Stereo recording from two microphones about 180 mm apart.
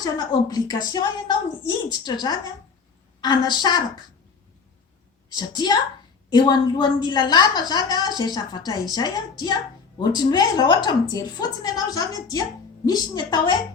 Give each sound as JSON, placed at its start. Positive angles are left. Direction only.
{"t": 0.0, "sound": "a woman's voice", "side_deg": 20}
{"t": 5.3, "sound": "a woman's voice", "side_deg": 25}